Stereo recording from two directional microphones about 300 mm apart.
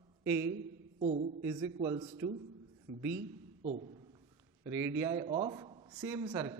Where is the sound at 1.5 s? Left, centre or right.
Centre.